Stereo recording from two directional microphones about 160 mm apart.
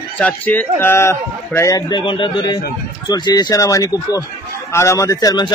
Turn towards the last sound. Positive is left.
turn(degrees=25)  # may be behind; listen again after turning